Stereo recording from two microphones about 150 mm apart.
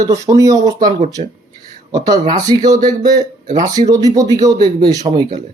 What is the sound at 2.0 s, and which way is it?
Speech, 25° right (ahead or behind).